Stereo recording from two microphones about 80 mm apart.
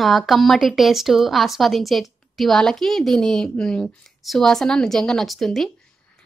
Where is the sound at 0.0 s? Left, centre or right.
Centre.